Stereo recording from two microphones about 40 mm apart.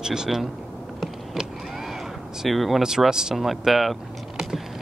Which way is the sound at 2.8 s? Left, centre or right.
Centre.